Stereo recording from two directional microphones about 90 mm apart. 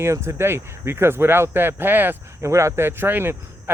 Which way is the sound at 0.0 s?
30° right (ahead or behind).